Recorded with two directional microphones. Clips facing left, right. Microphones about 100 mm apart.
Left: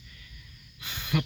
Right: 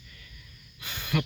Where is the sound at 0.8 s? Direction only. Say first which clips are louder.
Even; 15° left (ahead or behind).